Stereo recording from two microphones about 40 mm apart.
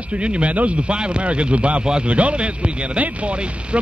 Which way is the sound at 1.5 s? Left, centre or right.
Right.